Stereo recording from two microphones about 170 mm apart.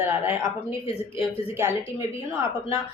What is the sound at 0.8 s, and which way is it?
Speech, 35° left (ahead or behind).